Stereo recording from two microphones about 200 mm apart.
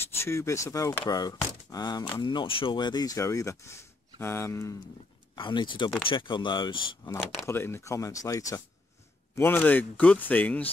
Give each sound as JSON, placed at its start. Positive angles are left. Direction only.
{"t": 0.0, "sound": "speech", "side_deg": 15}
{"t": 7.4, "sound": "speech", "side_deg": 10}